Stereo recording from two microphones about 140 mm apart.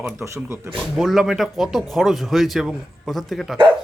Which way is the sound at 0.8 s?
Centre (ahead or behind).